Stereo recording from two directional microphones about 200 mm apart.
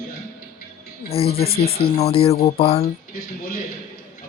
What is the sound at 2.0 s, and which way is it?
Speech, 30° left (ahead or behind).